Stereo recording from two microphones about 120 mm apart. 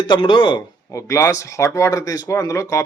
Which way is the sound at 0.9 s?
25° left (ahead or behind).